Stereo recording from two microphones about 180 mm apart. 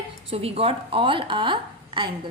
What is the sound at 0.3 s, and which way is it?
A woman's voice, 35° right (ahead or behind).